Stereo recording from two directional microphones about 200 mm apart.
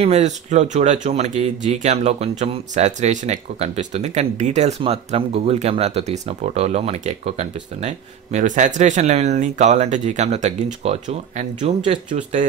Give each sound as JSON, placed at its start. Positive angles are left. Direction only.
{"t": 0.0, "sound": "speech", "side_deg": -35}
{"t": 12.1, "sound": "speech", "side_deg": -40}